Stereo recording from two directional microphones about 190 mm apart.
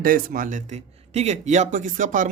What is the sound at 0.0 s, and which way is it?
Speech, 50° right (ahead or behind).